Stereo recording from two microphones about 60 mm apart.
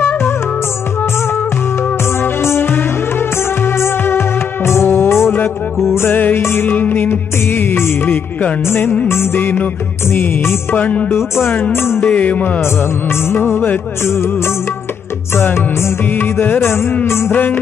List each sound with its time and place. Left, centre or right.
2.4 s music: left
10.8 s music: left
11.7 s music: left
12.1 s music: left
12.6 s music: left
16.1 s music: left
17.3 s music: left